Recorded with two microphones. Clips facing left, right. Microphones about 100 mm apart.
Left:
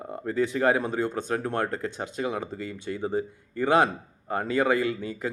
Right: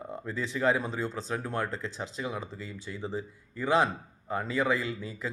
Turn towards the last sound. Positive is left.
turn(degrees=60)  # may be behind; listen again after turning